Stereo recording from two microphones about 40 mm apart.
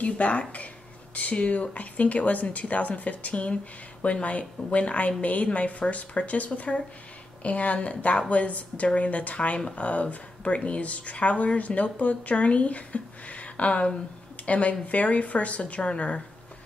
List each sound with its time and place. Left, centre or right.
0.0 s speech: left